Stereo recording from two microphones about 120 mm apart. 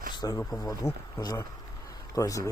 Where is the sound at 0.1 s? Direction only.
35° left (ahead or behind).